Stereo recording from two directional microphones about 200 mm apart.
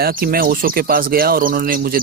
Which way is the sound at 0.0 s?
45° right (ahead or behind).